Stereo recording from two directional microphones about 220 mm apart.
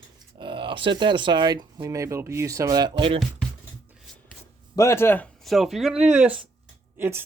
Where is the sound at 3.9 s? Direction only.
Centre (ahead or behind).